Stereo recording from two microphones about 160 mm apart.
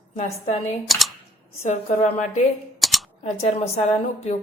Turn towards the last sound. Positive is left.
turn(degrees=40)  # may be behind; listen again after turning